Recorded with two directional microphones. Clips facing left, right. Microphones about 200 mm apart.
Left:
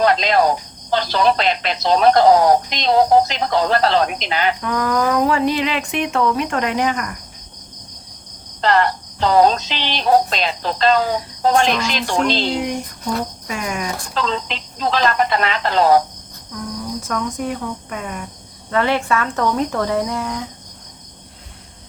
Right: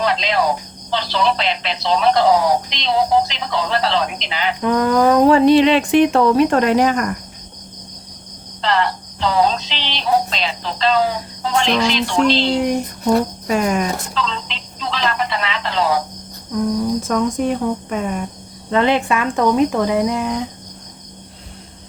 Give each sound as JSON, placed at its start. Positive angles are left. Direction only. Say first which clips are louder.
{"t": 0.0, "sound": "speech", "louder": "left 3 dB", "side_deg": 50}
{"t": 4.6, "sound": "a sound", "louder": "right 5 dB", "side_deg": -25}
{"t": 8.6, "sound": "speech", "louder": "left 2 dB", "side_deg": 45}
{"t": 13.5, "sound": "a sound", "louder": "right 8 dB", "side_deg": -40}
{"t": 14.1, "sound": "speech", "louder": "left 2 dB", "side_deg": 45}
{"t": 17.0, "sound": "cricket", "louder": "right 5 dB", "side_deg": -25}
{"t": 18.7, "sound": "speech", "louder": "right 2 dB", "side_deg": -20}